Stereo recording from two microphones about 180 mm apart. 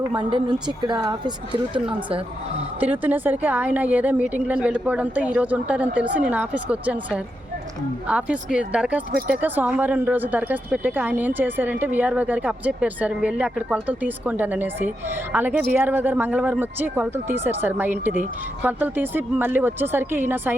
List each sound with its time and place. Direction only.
0.2 s a woman's voice: 25° right (ahead or behind)
2.8 s a woman's voice: 10° right (ahead or behind)